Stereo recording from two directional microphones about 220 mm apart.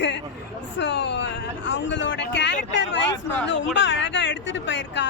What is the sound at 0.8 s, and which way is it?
Speech, 55° left (ahead or behind).